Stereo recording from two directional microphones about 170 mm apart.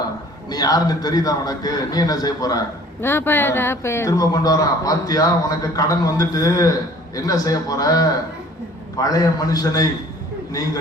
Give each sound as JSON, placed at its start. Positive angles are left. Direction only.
{"t": 0.5, "sound": "a man's voice", "side_deg": 20}